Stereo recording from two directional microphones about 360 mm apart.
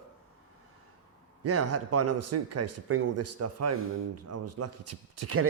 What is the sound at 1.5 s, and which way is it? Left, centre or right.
A man's voice, right.